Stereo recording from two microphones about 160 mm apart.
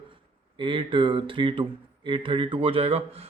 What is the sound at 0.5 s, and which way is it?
Speech, 30° right (ahead or behind).